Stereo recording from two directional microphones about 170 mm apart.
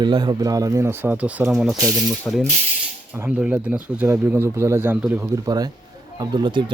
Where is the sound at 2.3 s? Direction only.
15° left (ahead or behind).